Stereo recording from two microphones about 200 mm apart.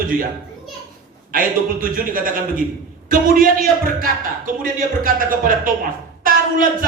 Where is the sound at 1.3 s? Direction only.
45° right (ahead or behind).